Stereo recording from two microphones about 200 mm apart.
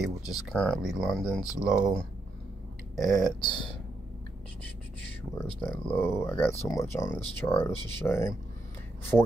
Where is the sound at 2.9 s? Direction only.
Centre (ahead or behind).